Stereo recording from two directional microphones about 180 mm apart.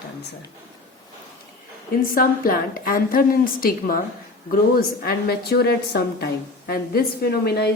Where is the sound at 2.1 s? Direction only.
55° left (ahead or behind).